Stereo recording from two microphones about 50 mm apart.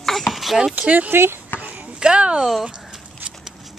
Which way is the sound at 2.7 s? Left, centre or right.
Centre.